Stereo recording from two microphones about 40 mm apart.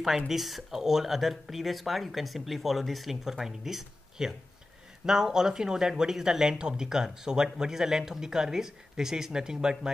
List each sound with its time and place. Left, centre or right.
0.3 s speech: centre